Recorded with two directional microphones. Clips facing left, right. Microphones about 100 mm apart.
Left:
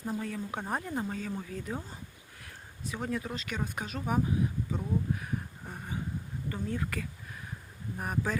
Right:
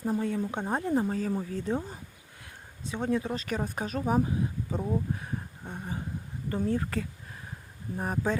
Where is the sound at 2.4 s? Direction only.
25° right (ahead or behind).